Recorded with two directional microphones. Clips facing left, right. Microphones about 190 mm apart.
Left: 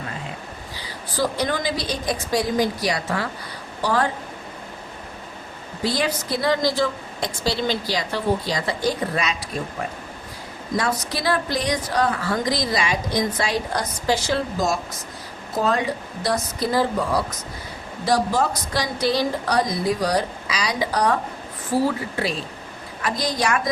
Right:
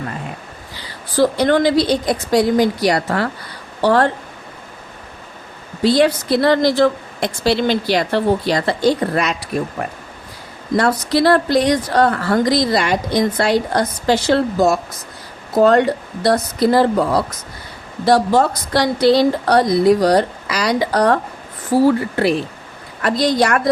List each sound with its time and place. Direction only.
0.8 s a woman's voice: 65° right (ahead or behind)
5.8 s a woman's voice: 70° right (ahead or behind)